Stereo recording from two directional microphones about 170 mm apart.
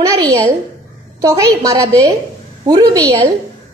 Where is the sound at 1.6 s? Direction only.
20° right (ahead or behind).